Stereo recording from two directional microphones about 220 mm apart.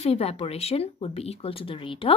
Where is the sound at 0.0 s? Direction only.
25° left (ahead or behind).